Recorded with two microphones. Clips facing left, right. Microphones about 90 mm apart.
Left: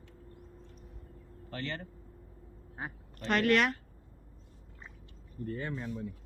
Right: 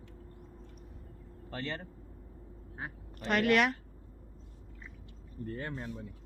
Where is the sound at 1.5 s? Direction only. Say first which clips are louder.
Even; 15° right (ahead or behind).